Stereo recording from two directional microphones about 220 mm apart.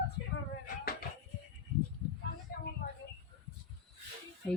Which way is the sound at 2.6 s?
45° left (ahead or behind).